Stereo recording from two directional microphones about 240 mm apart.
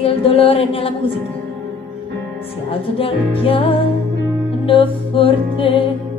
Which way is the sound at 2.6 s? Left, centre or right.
Left.